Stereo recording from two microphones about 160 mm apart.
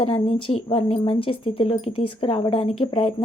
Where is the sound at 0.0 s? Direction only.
35° left (ahead or behind).